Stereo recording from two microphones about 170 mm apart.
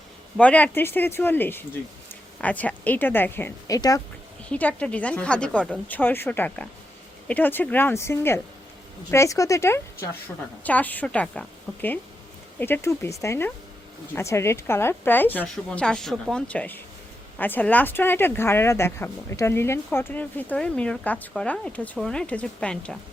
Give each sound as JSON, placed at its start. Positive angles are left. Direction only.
{"t": 0.3, "sound": "speech", "side_deg": 10}
{"t": 4.4, "sound": "speech", "side_deg": 10}